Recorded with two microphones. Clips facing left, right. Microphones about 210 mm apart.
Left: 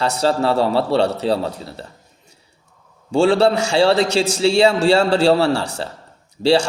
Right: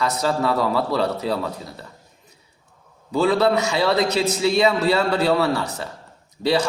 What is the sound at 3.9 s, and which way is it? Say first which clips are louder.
Speech: left 2 dB; 80° left.